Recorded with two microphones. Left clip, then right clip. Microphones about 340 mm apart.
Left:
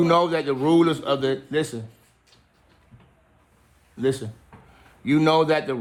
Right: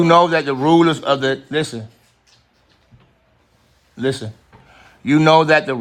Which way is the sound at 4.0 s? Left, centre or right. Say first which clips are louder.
Right 3 dB; right.